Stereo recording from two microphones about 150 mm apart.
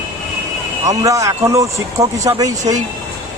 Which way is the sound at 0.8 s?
20° right (ahead or behind).